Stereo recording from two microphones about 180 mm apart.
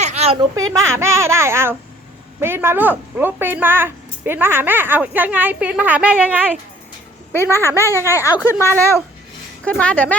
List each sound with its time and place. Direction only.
0.0 s a sound: 40° right (ahead or behind)
0.3 s a woman's voice: 20° right (ahead or behind)
7.5 s a woman's voice: 15° right (ahead or behind)
8.1 s speech: 15° left (ahead or behind)